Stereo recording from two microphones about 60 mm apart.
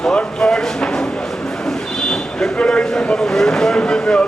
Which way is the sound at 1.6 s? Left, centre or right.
Centre.